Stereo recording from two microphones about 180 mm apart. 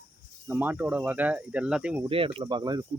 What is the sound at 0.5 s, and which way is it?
Speech, 10° right (ahead or behind).